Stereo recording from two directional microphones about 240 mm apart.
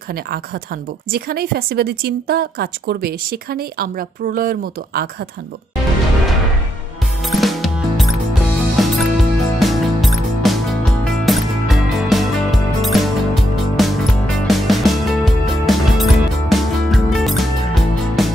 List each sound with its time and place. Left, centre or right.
1.1 s a woman's voice: right
7.2 s music: centre